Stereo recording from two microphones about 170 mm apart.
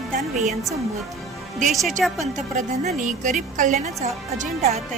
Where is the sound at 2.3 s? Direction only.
45° right (ahead or behind).